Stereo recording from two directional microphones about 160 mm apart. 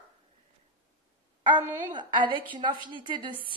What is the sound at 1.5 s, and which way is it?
A woman's voice, 30° right (ahead or behind).